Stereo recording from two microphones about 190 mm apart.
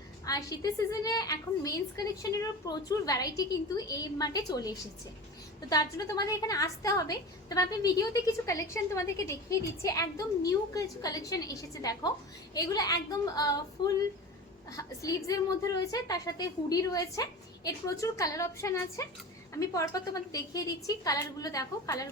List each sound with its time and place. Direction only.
0.3 s a woman's voice: 20° left (ahead or behind)